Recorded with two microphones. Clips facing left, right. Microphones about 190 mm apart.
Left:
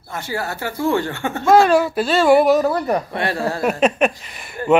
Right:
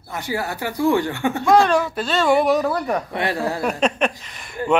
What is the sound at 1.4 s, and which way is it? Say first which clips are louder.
Speech: left 3 dB; 5° left (ahead or behind).